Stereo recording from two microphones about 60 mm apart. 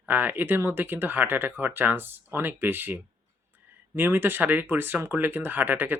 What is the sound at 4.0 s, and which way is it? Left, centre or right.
Speech, right.